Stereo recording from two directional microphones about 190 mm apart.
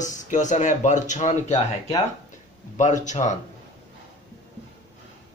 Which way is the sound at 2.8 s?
40° left (ahead or behind).